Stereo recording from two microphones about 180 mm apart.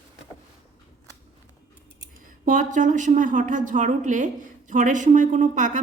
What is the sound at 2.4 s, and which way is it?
A woman's voice, 45° right (ahead or behind).